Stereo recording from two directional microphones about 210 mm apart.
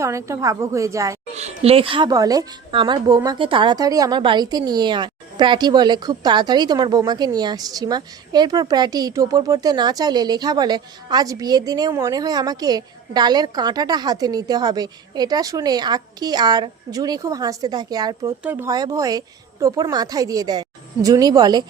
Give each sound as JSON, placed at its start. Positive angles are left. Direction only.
{"t": 0.0, "sound": "a woman's voice", "side_deg": -15}
{"t": 1.4, "sound": "a woman's voice", "side_deg": -30}